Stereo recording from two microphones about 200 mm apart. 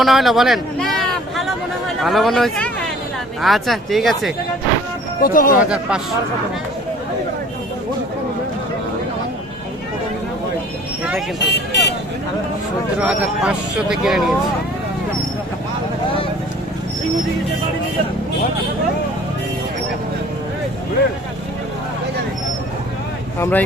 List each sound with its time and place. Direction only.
0.0 s speech: centre (ahead or behind)
5.2 s speech: 45° left (ahead or behind)
5.6 s speech: 5° right (ahead or behind)
11.3 s vehicle: 55° left (ahead or behind)
13.0 s speech: 5° right (ahead or behind)
23.4 s speech: 10° left (ahead or behind)